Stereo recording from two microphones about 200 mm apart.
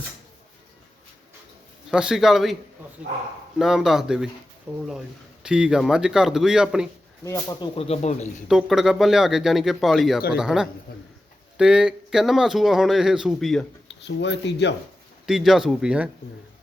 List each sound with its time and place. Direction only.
1.9 s speech: 5° right (ahead or behind)
3.6 s speech: centre (ahead or behind)
7.3 s speech: 15° left (ahead or behind)
7.8 s speech: 35° left (ahead or behind)
8.4 s speech: centre (ahead or behind)
14.0 s speech: 60° left (ahead or behind)
15.3 s speech: centre (ahead or behind)